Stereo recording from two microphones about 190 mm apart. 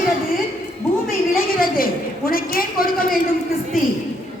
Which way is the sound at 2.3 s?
50° left (ahead or behind).